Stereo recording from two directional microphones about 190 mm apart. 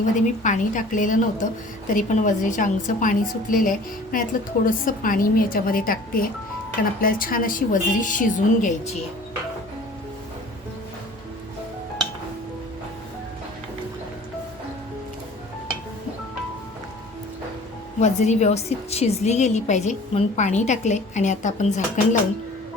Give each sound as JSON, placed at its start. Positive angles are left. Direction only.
{"t": 0.4, "sound": "a woman's voice", "side_deg": 40}
{"t": 18.0, "sound": "a woman's voice", "side_deg": 35}